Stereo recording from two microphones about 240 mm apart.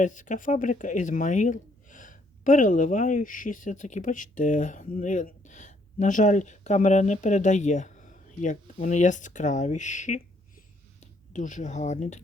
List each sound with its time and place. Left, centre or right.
0.0 s speech: left